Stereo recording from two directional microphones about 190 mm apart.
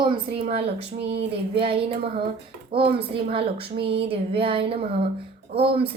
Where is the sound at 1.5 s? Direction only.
30° right (ahead or behind).